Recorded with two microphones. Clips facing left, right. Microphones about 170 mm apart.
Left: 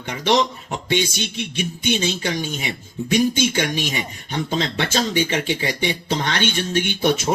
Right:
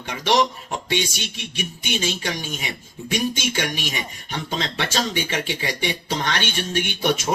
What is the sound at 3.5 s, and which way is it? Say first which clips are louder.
A man's voice: left 4 dB; 20° left (ahead or behind).